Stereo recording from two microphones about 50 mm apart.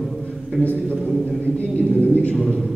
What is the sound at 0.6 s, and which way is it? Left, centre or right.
Speech, left.